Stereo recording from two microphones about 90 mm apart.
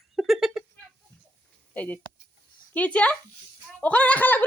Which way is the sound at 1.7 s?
20° left (ahead or behind).